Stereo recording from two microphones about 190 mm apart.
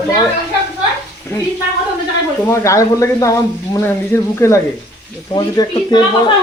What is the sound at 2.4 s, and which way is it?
Speech, 15° left (ahead or behind).